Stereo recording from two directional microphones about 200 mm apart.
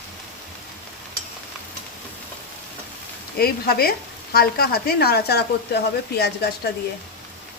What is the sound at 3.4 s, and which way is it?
Speech, 50° left (ahead or behind).